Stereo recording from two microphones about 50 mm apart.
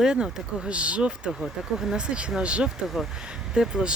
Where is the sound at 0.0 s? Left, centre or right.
Centre.